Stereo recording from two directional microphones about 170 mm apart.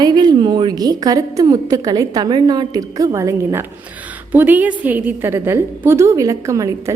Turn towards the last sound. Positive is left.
turn(degrees=-20)  # may be behind; listen again after turning